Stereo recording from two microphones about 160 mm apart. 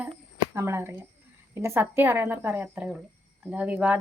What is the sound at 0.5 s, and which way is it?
Speech, 15° right (ahead or behind).